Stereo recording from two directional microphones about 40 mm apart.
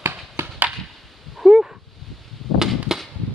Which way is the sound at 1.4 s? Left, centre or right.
Centre.